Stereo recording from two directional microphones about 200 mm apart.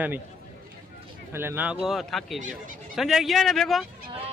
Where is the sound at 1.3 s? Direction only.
10° right (ahead or behind).